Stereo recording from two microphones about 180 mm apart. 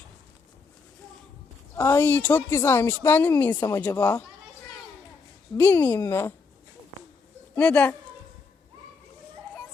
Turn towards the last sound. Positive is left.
turn(degrees=10)  # may be behind; listen again after turning